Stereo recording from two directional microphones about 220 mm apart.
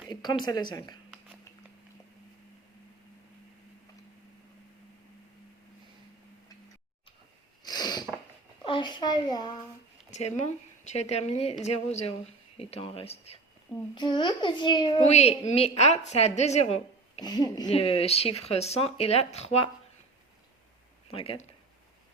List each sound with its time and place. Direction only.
0.1 s a sound: 20° left (ahead or behind)
0.4 s a child's voice: 20° left (ahead or behind)
7.6 s a sound: 20° left (ahead or behind)
8.6 s a child's voice: 20° left (ahead or behind)
10.1 s a child's voice: 30° left (ahead or behind)
21.1 s a child's voice: 25° left (ahead or behind)